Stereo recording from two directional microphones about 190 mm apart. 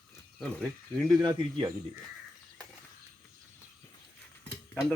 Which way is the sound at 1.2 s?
20° right (ahead or behind).